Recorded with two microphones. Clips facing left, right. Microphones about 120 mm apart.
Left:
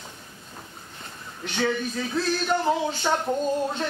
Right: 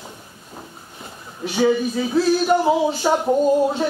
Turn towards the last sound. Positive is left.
turn(degrees=-10)  # may be behind; listen again after turning